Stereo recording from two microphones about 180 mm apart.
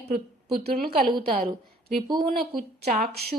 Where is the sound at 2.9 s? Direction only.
60° right (ahead or behind).